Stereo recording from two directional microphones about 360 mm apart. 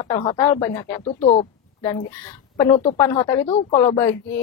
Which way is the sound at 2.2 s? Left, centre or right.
Centre.